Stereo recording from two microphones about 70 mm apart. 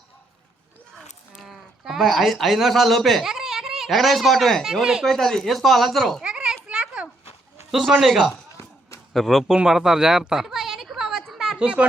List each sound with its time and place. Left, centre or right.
1.4 s speech: centre
4.7 s speech: centre
5.0 s speech: centre
6.2 s children playing: centre
7.7 s speech: centre
9.6 s a sound: centre
11.6 s speech: centre